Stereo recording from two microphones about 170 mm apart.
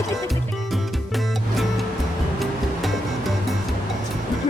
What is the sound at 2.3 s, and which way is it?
Music, centre (ahead or behind).